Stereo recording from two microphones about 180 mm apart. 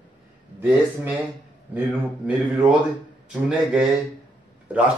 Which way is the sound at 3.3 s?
5° right (ahead or behind).